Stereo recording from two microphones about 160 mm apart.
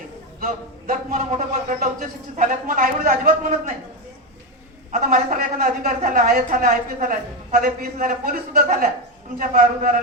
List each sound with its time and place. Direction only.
0.3 s a woman's voice: 55° right (ahead or behind)
4.9 s a woman's voice: 60° right (ahead or behind)